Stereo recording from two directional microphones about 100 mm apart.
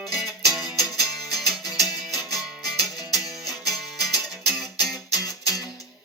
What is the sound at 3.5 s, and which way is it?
Music, centre (ahead or behind).